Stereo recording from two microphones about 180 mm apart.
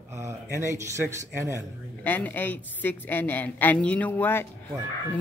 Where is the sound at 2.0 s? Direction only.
10° left (ahead or behind).